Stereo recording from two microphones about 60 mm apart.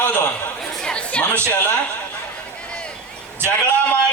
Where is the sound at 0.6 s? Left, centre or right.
Centre.